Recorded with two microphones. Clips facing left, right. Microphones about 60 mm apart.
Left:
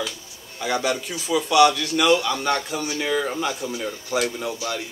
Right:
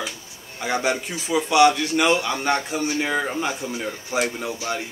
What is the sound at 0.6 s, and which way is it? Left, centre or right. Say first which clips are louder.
A man's voice: even; right.